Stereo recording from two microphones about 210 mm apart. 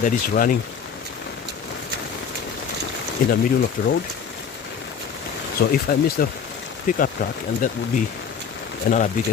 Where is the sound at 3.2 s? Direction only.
40° left (ahead or behind).